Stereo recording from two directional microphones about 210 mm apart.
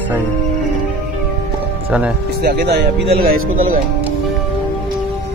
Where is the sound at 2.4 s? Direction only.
45° right (ahead or behind).